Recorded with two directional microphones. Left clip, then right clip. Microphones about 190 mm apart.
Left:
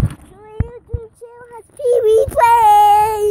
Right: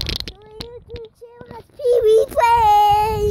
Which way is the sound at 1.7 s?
5° right (ahead or behind).